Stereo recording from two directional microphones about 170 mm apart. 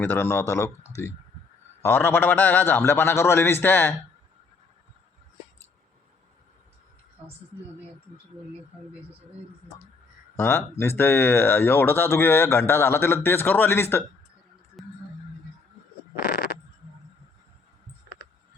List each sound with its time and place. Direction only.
0.0 s speech: 15° left (ahead or behind)
10.3 s speech: 15° left (ahead or behind)
14.8 s a sound: centre (ahead or behind)